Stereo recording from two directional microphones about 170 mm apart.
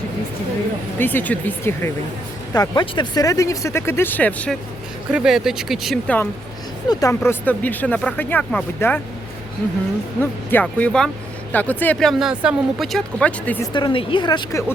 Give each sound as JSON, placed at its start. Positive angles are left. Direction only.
{"t": 0.9, "sound": "speech", "side_deg": 10}
{"t": 2.5, "sound": "speech", "side_deg": 25}
{"t": 5.1, "sound": "speech", "side_deg": -5}
{"t": 6.8, "sound": "speech", "side_deg": 20}
{"t": 10.2, "sound": "speech", "side_deg": 10}
{"t": 13.7, "sound": "speech", "side_deg": 30}